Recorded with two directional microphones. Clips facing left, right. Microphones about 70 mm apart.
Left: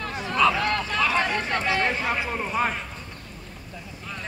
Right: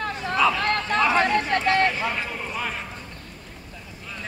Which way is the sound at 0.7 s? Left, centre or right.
Right.